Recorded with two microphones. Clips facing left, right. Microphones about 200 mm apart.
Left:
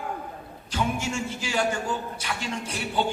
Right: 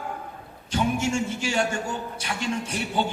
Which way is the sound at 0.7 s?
25° right (ahead or behind).